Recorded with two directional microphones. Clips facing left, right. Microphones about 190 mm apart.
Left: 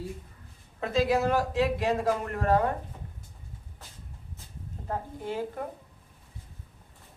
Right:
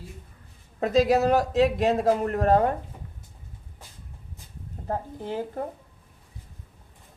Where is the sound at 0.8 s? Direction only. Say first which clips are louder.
Right 5 dB; 40° right (ahead or behind).